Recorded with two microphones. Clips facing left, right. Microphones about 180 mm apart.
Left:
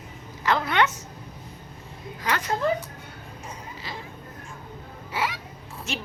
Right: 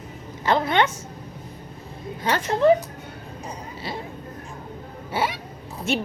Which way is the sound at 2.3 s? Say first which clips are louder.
Right 4 dB; 30° right (ahead or behind).